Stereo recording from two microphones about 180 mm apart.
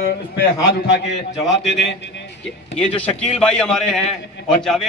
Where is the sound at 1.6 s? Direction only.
85° left.